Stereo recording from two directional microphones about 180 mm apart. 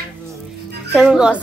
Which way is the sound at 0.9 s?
5° right (ahead or behind).